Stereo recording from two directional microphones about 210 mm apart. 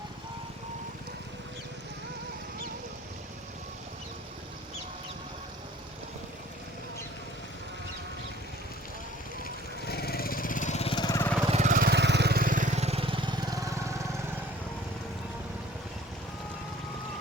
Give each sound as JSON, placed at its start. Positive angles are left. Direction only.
{"t": 9.4, "sound": "lawn mower", "side_deg": 50}
{"t": 11.4, "sound": "vehicle", "side_deg": -35}